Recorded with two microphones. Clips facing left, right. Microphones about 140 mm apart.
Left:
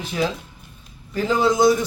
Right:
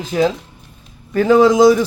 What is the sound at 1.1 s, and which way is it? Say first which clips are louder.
Speech: right 8 dB; 70° right (ahead or behind).